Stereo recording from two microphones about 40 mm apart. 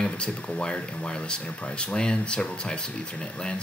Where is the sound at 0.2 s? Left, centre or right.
Left.